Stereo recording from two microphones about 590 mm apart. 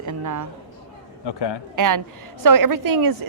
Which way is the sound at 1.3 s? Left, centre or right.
Left.